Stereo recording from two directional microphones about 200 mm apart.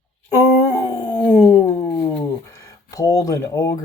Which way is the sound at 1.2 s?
10° left (ahead or behind).